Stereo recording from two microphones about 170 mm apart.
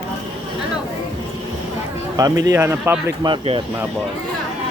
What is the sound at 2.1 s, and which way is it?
Speech, 20° right (ahead or behind).